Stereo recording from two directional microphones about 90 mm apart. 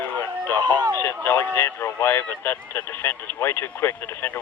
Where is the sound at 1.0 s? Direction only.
25° left (ahead or behind).